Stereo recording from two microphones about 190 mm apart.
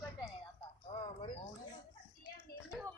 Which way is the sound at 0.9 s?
35° left (ahead or behind).